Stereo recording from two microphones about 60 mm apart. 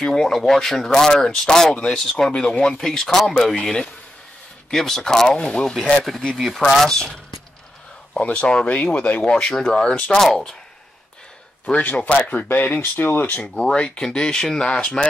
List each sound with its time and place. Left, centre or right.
0.0 s speech: centre
8.1 s speech: centre
9.2 s speech: centre
9.8 s speech: centre
11.6 s speech: left
13.4 s speech: centre